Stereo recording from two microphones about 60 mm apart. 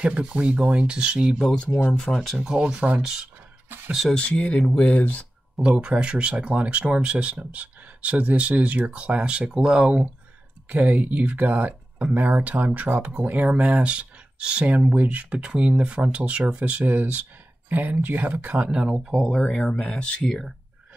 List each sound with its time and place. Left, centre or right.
0.0 s speech: centre
1.7 s speech: left
2.3 s speech: centre
3.6 s a sound: right
4.1 s speech: centre
5.6 s speech: centre
18.7 s speech: centre
19.3 s speech: centre